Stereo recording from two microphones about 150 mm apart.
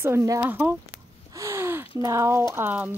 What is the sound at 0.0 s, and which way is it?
Speech, 15° right (ahead or behind).